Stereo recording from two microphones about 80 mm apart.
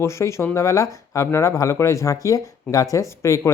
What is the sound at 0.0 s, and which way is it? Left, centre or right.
Speech, left.